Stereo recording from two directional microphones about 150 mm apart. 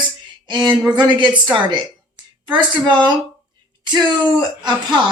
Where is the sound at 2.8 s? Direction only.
30° right (ahead or behind).